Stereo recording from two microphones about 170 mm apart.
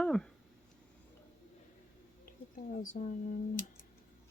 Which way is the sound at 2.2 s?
55° left (ahead or behind).